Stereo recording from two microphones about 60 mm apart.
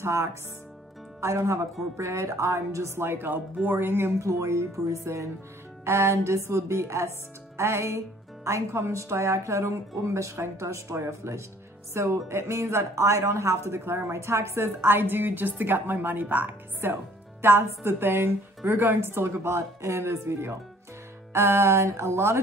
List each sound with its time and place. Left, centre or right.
0.0 s a woman's voice: right
4.2 s a woman's voice: right